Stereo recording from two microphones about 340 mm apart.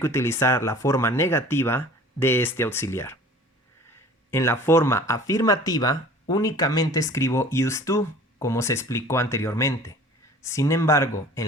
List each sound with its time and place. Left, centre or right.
0.0 s speech: centre
4.3 s speech: centre